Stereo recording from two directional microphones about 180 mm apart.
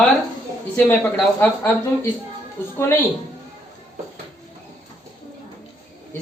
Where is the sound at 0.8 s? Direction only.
10° left (ahead or behind).